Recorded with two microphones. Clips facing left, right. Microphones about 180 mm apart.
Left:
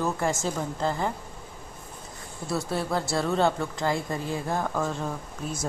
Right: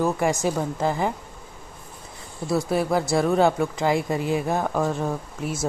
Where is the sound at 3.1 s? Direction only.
15° right (ahead or behind).